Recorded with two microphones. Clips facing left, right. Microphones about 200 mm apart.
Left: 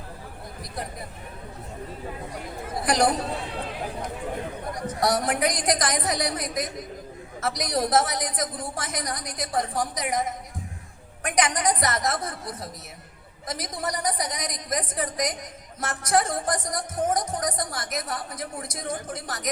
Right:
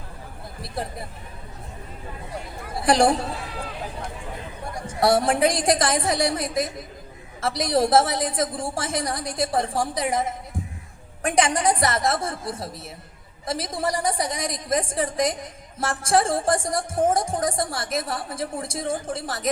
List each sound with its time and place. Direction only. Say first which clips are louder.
0.6 s speech: right 4 dB; 30° right (ahead or behind)
2.8 s speech: right 4 dB; 30° right (ahead or behind)
4.7 s speech: right 5 dB; 30° right (ahead or behind)